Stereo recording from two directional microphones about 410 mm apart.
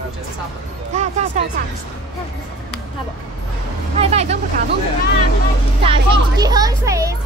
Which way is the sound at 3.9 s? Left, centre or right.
Centre.